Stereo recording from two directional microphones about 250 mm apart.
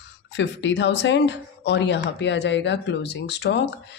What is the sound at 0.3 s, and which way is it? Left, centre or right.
Speech, left.